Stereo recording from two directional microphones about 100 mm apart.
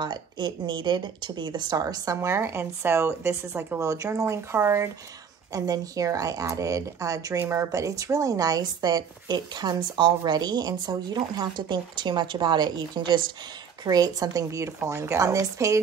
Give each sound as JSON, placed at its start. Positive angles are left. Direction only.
{"t": 0.0, "sound": "speech", "side_deg": -50}